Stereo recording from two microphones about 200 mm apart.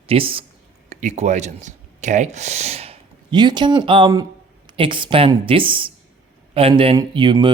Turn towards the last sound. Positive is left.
turn(degrees=-25)  # may be behind; listen again after turning